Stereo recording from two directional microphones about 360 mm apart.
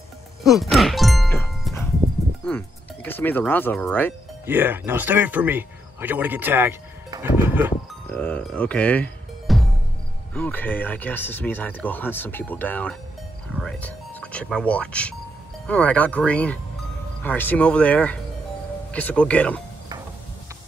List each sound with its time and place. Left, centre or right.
0.4 s music: centre
2.4 s speech: centre